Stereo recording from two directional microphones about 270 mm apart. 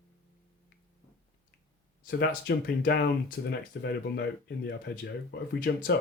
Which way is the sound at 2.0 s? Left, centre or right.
Left.